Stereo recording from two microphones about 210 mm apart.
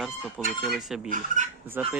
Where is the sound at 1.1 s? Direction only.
35° right (ahead or behind).